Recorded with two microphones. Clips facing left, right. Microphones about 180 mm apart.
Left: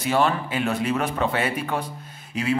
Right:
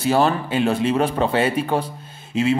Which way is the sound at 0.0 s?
35° right (ahead or behind).